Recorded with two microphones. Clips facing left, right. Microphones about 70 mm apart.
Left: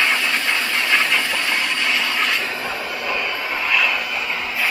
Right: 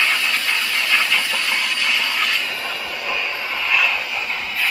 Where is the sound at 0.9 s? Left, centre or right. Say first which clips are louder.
Left 1 dB; centre.